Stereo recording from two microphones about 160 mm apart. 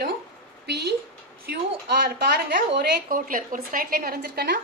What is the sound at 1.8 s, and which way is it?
A woman's voice, 80° right.